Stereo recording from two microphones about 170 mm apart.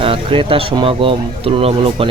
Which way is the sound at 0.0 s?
30° right (ahead or behind).